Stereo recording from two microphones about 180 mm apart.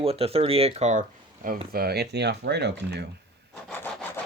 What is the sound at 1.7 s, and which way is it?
Speech, 60° right (ahead or behind).